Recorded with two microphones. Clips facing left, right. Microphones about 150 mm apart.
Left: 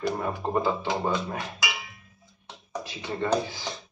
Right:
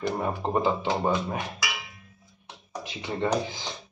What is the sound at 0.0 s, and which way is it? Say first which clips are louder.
Speech: even; 20° right (ahead or behind).